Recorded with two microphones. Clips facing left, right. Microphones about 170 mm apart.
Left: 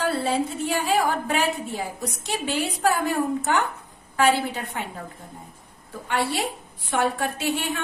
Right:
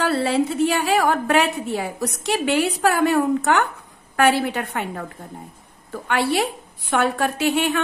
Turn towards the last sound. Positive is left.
turn(degrees=-75)  # may be behind; listen again after turning